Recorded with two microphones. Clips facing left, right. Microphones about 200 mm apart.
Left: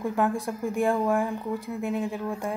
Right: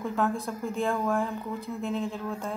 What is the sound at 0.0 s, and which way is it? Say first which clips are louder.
Speech: left 2 dB; 15° left (ahead or behind).